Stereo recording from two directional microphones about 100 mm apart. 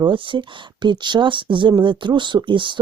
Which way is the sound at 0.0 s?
55° right (ahead or behind).